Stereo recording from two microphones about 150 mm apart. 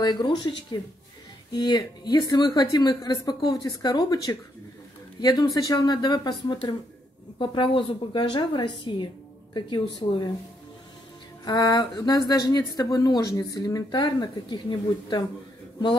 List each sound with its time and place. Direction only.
0.0 s a woman's voice: 30° left (ahead or behind)
11.4 s speech: 25° left (ahead or behind)